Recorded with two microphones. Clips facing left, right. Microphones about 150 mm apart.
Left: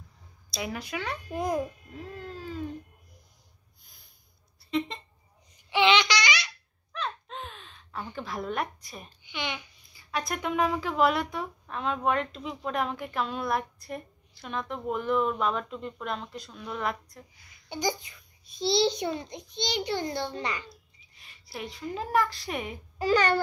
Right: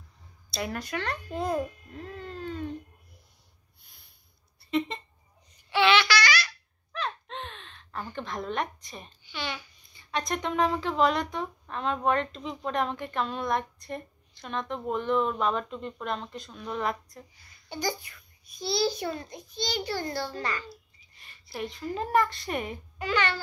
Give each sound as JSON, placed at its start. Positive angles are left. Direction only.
{"t": 0.5, "sound": "speech", "side_deg": 0}
{"t": 1.3, "sound": "a child's voice", "side_deg": 15}
{"t": 4.6, "sound": "a sound", "side_deg": 0}
{"t": 5.7, "sound": "babbling", "side_deg": 15}
{"t": 6.9, "sound": "a sound", "side_deg": 0}
{"t": 8.1, "sound": "speech", "side_deg": 5}
{"t": 9.3, "sound": "speech", "side_deg": 15}
{"t": 9.9, "sound": "speech", "side_deg": 5}
{"t": 17.6, "sound": "a child's voice", "side_deg": 15}
{"t": 20.6, "sound": "a woman's voice", "side_deg": 0}
{"t": 22.9, "sound": "a child's voice", "side_deg": 40}